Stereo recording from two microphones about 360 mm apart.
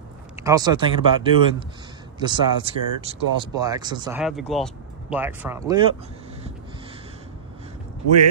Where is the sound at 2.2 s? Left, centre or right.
Centre.